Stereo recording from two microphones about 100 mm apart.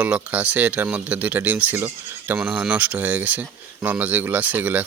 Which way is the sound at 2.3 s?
10° right (ahead or behind).